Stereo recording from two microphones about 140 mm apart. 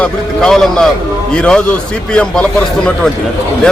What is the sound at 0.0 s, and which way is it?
A man's voice, 5° left (ahead or behind).